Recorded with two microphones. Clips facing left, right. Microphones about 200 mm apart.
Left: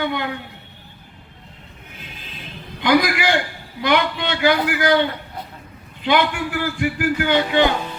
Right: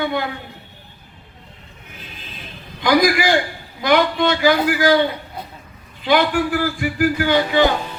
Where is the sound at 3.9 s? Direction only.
45° right (ahead or behind).